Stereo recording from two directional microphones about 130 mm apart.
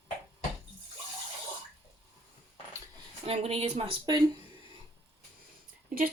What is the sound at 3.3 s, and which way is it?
Speech, 50° right (ahead or behind).